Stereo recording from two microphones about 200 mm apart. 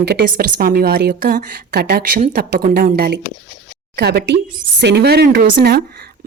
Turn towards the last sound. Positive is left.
turn(degrees=-50)  # may be behind; listen again after turning